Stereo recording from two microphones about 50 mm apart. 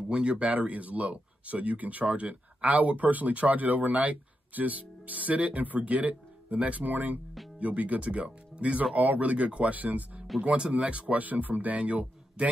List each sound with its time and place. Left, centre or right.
0.1 s speech: right